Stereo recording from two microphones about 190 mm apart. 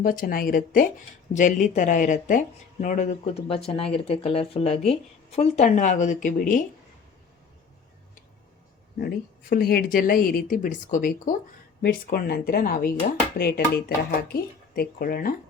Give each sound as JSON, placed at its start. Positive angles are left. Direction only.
{"t": 0.0, "sound": "a woman's voice", "side_deg": 45}
{"t": 9.0, "sound": "a woman's voice", "side_deg": 55}